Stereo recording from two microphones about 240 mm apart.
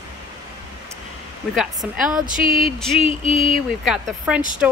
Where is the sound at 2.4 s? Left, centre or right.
Left.